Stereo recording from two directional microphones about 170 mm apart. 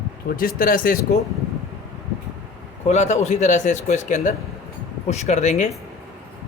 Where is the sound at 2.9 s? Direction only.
40° left (ahead or behind).